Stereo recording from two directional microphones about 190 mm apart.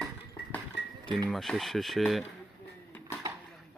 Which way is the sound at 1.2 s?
Centre (ahead or behind).